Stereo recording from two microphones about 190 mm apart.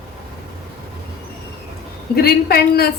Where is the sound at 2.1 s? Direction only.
55° left (ahead or behind).